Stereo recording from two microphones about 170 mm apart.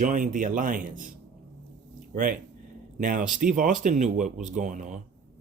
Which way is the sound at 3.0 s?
50° right (ahead or behind).